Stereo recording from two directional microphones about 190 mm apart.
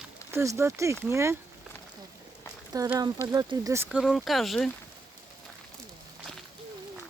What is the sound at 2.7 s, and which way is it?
Speech, 20° right (ahead or behind).